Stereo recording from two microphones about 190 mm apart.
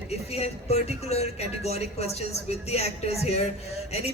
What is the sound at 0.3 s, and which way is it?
A woman's voice, 35° left (ahead or behind).